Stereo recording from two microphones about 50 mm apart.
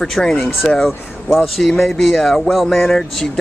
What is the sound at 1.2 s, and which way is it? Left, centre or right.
Speech, centre.